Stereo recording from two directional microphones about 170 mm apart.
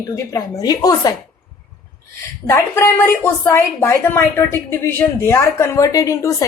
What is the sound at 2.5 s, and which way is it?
A woman's voice, 15° left (ahead or behind).